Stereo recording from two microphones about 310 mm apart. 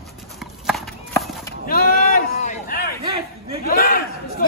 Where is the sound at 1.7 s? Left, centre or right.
Left.